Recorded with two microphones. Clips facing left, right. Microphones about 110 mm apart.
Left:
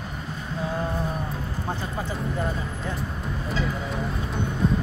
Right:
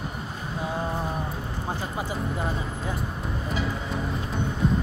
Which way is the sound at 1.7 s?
10° right (ahead or behind).